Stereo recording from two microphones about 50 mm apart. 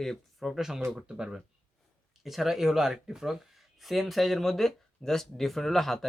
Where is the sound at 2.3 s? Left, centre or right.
Centre.